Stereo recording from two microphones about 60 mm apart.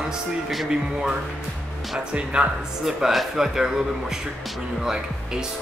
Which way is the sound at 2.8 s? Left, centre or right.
Centre.